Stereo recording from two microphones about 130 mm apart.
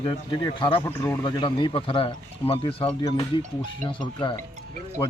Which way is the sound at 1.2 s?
35° left (ahead or behind).